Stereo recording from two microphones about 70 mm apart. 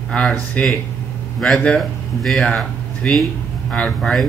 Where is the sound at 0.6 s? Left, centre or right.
Centre.